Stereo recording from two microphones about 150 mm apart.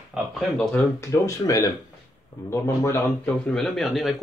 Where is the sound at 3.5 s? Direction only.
Centre (ahead or behind).